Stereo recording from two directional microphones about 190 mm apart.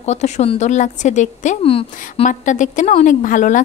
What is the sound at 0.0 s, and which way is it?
A woman's voice, 35° left (ahead or behind).